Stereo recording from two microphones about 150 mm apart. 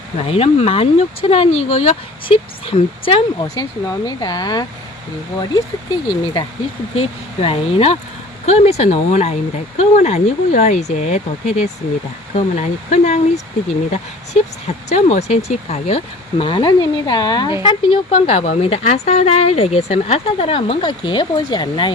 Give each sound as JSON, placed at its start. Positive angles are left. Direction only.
{"t": 0.3, "sound": "speech", "side_deg": 40}
{"t": 3.4, "sound": "speech", "side_deg": 25}
{"t": 6.9, "sound": "speech", "side_deg": 40}
{"t": 14.8, "sound": "speech", "side_deg": 50}
{"t": 16.4, "sound": "speech", "side_deg": 35}
{"t": 18.3, "sound": "speech", "side_deg": 50}